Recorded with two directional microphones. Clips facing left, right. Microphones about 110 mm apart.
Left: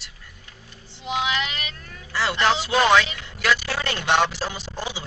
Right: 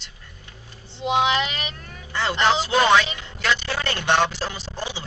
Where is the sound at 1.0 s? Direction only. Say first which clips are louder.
Right 5 dB; 25° right (ahead or behind).